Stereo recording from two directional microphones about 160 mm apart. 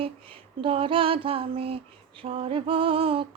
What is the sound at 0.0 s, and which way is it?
Music, 35° right (ahead or behind).